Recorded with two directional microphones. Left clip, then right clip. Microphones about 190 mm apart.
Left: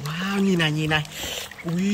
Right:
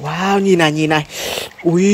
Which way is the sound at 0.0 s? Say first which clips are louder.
Right 11 dB; 15° right (ahead or behind).